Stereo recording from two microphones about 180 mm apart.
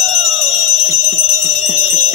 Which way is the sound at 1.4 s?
40° left (ahead or behind).